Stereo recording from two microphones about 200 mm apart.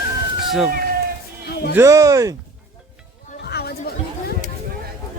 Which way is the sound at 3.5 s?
55° left (ahead or behind).